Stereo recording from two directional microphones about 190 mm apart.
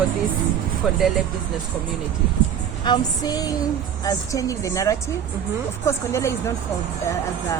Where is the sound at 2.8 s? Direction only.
20° left (ahead or behind).